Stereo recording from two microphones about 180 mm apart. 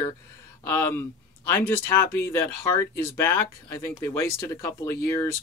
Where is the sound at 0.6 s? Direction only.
15° left (ahead or behind).